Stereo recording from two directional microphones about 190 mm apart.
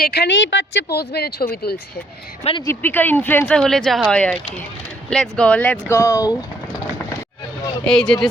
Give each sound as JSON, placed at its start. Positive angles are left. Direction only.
{"t": 0.0, "sound": "speech", "side_deg": 60}
{"t": 2.4, "sound": "speech", "side_deg": 30}
{"t": 2.6, "sound": "speech", "side_deg": 10}
{"t": 6.0, "sound": "speech", "side_deg": 15}
{"t": 7.9, "sound": "speech", "side_deg": 0}